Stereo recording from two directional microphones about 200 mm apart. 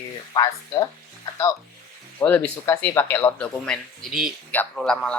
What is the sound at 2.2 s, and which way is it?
A man's voice, 10° left (ahead or behind).